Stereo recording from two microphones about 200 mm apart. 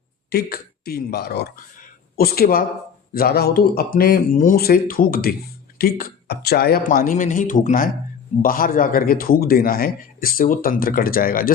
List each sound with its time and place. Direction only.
0.3 s a man's voice: 50° left (ahead or behind)